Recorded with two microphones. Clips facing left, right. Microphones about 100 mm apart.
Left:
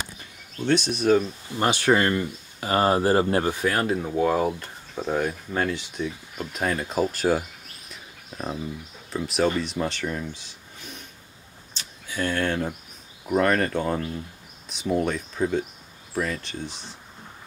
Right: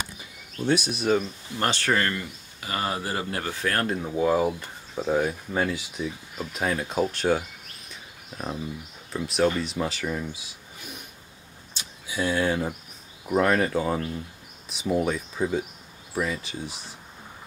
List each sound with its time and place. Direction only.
0.2 s speech: 5° right (ahead or behind); by 2.2 s 20° left (ahead or behind)
2.6 s speech: 40° left (ahead or behind)
3.4 s speech: 15° left (ahead or behind)
7.9 s a sound: 5° left (ahead or behind)
9.1 s speech: centre (ahead or behind)
11.7 s a sound: 10° right (ahead or behind)
13.3 s speech: 5° right (ahead or behind)